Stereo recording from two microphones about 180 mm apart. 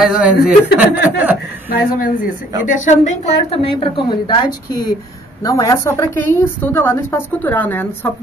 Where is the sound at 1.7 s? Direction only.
50° left (ahead or behind).